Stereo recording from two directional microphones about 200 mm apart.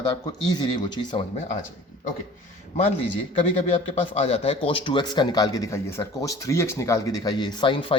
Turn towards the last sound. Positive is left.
turn(degrees=25)  # may be behind; listen again after turning